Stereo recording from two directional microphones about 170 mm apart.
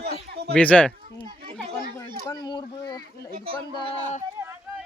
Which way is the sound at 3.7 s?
35° left (ahead or behind).